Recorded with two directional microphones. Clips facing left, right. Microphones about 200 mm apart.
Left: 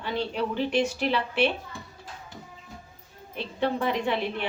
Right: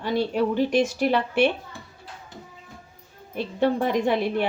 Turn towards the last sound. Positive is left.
turn(degrees=-45)  # may be behind; listen again after turning